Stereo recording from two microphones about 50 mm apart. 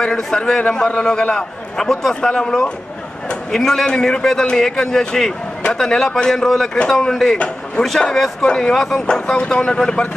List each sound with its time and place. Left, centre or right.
0.0 s a man's voice: centre
7.3 s speech: left
7.8 s a man's voice: centre